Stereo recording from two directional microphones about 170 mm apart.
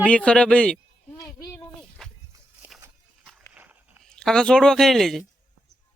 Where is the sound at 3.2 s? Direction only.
5° right (ahead or behind).